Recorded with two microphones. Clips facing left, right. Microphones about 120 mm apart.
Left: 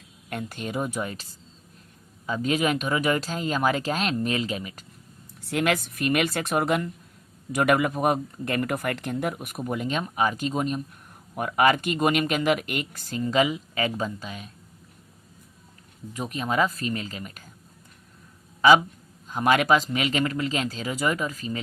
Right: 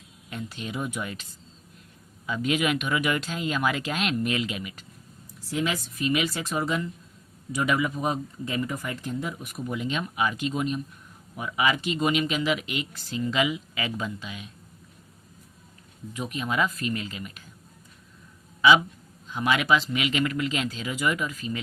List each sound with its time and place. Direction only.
0.3 s speech: 55° left (ahead or behind)
5.4 s speech: 65° left (ahead or behind); by 10.8 s 40° left (ahead or behind)
11.3 s speech: 55° left (ahead or behind)
16.1 s speech: 35° left (ahead or behind)
19.3 s speech: 45° left (ahead or behind)